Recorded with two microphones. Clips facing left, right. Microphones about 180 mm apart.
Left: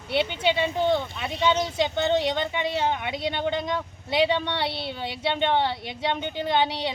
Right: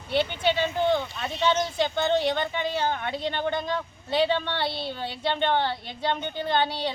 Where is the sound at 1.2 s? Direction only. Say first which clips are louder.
Left 1 dB; 15° left (ahead or behind).